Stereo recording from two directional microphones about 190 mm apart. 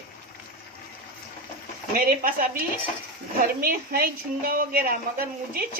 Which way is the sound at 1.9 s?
50° right (ahead or behind).